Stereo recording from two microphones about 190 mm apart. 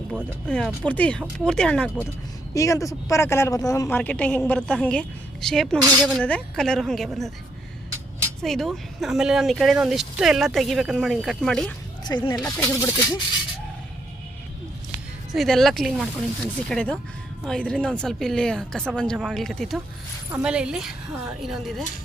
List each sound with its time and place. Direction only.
0.4 s speech: 5° left (ahead or behind)
2.6 s a woman's voice: 15° left (ahead or behind); by 7.3 s centre (ahead or behind)
8.4 s speech: centre (ahead or behind)
12.0 s a woman's voice: 20° left (ahead or behind)
15.3 s speech: centre (ahead or behind)